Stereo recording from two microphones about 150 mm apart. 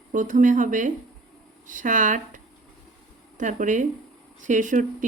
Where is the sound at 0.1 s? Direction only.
60° right (ahead or behind).